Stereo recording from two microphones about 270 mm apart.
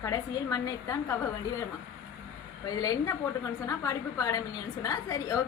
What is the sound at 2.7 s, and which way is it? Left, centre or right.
A woman's voice, centre.